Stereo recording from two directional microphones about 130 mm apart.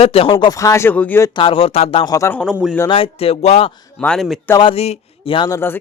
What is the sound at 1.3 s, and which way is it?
Speech, 45° left (ahead or behind).